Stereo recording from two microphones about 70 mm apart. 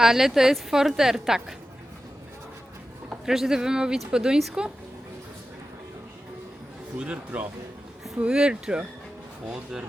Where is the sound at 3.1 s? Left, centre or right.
Centre.